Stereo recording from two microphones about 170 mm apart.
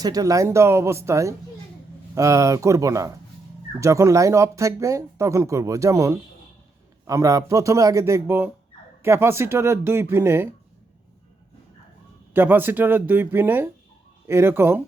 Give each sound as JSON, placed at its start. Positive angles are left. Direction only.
{"t": 0.0, "sound": "a man's voice", "side_deg": -20}
{"t": 12.3, "sound": "speech", "side_deg": -10}